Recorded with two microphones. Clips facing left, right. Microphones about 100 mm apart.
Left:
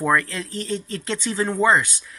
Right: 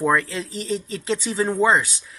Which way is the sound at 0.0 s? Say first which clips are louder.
Right 1 dB; 5° right (ahead or behind).